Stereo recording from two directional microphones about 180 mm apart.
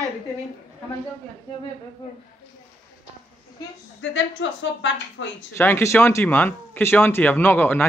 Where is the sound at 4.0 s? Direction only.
90° left.